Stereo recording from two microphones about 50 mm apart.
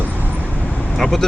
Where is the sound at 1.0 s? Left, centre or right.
Centre.